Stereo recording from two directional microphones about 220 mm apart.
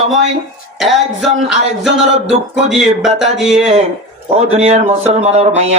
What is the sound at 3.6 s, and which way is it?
Speech, 30° right (ahead or behind).